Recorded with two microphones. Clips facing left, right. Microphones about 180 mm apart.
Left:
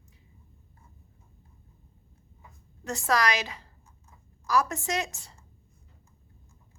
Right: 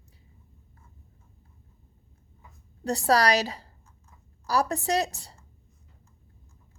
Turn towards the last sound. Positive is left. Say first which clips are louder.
# right 5 dB
turn(degrees=-35)  # may be behind; listen again after turning